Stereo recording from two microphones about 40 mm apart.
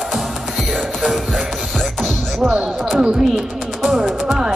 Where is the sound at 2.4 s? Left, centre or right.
Right.